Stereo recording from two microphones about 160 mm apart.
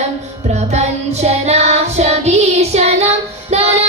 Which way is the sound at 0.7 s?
45° right (ahead or behind).